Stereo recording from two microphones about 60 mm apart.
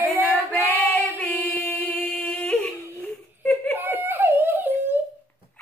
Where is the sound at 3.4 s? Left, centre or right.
Left.